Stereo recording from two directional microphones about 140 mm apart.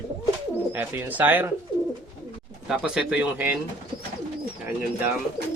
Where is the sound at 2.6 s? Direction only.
5° right (ahead or behind).